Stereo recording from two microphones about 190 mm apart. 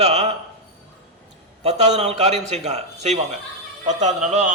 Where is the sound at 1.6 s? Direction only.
35° right (ahead or behind).